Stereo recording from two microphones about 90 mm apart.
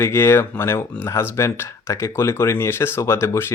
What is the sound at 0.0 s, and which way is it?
Speech, 25° left (ahead or behind).